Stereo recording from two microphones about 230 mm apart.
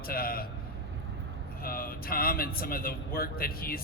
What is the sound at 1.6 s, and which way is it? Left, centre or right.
A man's voice, left.